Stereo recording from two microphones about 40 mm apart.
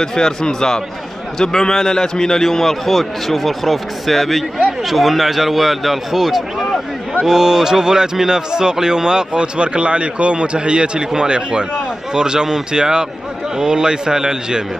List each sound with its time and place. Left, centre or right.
0.0 s a man's voice: centre